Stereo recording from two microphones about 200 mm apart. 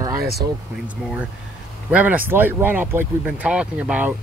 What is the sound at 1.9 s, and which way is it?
Speech, 5° right (ahead or behind).